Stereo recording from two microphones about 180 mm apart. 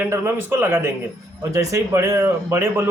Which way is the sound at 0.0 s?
10° right (ahead or behind).